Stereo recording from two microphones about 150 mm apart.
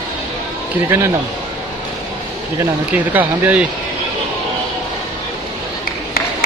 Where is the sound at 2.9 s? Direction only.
10° right (ahead or behind).